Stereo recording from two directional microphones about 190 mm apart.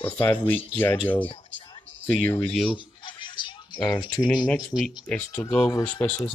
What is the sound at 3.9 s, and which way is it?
Speech, 20° left (ahead or behind).